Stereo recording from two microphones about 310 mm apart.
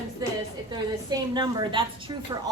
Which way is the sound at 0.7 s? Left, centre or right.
Centre.